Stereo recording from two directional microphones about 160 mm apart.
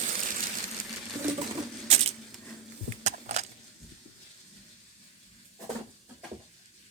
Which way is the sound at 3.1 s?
45° right (ahead or behind).